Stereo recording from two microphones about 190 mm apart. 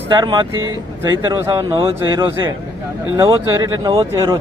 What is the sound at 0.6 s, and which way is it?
Speech, 90° right.